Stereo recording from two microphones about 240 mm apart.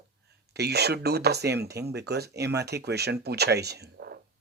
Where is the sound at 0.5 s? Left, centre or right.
Right.